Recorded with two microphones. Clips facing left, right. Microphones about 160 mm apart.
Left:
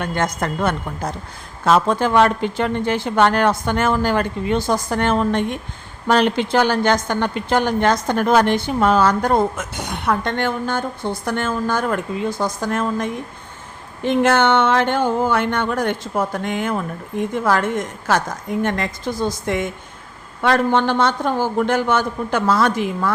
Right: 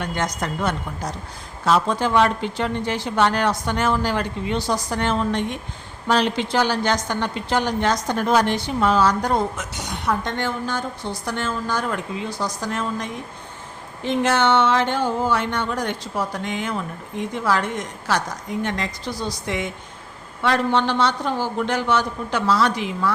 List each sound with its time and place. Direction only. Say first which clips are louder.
0.0 s a woman's voice: left 4 dB; 55° left (ahead or behind)